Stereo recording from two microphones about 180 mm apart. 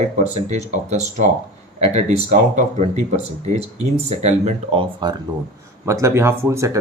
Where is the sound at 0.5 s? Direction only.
40° right (ahead or behind).